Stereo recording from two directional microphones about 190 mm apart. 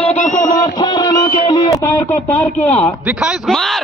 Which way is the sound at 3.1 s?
5° right (ahead or behind).